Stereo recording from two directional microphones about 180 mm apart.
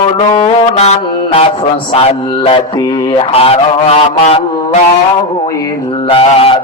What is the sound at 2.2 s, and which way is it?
A man's voice, 25° left (ahead or behind).